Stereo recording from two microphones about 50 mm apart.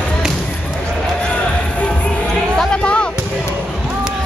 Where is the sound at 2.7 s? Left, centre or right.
Left.